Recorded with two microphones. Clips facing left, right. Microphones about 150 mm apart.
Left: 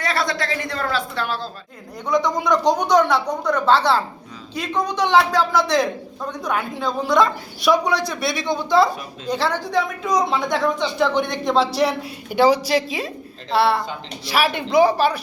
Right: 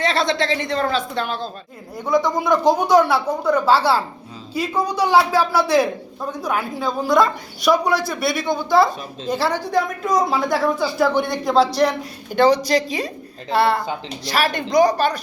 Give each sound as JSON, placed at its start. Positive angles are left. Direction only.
{"t": 0.0, "sound": "a woman's voice", "side_deg": -25}
{"t": 2.0, "sound": "speech", "side_deg": -5}